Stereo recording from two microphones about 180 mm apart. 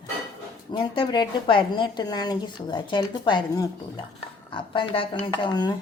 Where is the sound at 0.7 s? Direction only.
30° left (ahead or behind).